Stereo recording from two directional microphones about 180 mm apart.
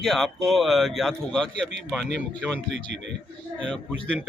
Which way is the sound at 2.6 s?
75° right (ahead or behind).